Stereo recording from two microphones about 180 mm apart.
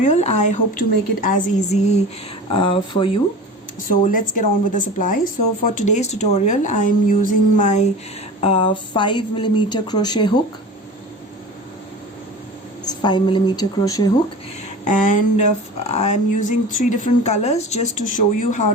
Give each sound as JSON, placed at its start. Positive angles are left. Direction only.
{"t": 0.0, "sound": "speech", "side_deg": 40}
{"t": 2.5, "sound": "a woman's voice", "side_deg": 30}
{"t": 3.8, "sound": "speech", "side_deg": 50}
{"t": 8.4, "sound": "a woman's voice", "side_deg": 30}
{"t": 12.8, "sound": "a woman's voice", "side_deg": 25}
{"t": 14.8, "sound": "speech", "side_deg": 45}